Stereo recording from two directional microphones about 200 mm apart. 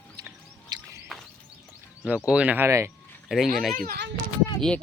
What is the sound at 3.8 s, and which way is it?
Speech, 50° right (ahead or behind).